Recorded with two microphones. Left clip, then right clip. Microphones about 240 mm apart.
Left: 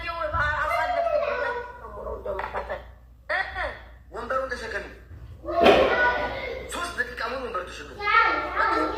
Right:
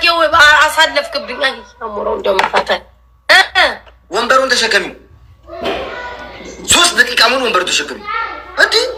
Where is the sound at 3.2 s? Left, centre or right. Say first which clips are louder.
Right 19 dB; right.